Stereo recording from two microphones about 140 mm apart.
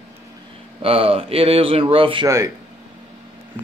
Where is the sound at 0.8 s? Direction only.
45° right (ahead or behind).